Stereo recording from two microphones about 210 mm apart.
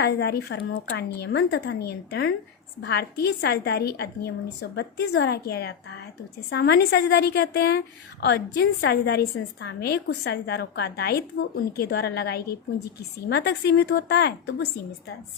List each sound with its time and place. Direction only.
0.0 s a woman's voice: 50° left (ahead or behind)